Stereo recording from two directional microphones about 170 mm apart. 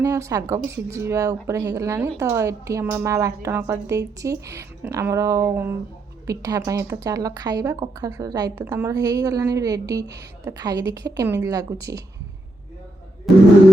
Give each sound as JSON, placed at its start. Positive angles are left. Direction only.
{"t": 0.0, "sound": "a woman's voice", "side_deg": -15}
{"t": 13.3, "sound": "speech", "side_deg": 0}